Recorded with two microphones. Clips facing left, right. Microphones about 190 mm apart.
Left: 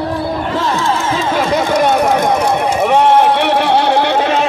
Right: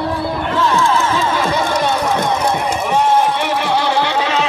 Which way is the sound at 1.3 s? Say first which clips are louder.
Left 4 dB; 55° left (ahead or behind).